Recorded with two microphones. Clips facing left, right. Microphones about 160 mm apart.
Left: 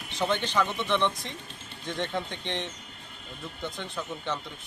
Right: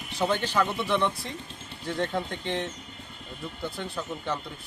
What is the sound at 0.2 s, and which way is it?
Speech, 10° right (ahead or behind).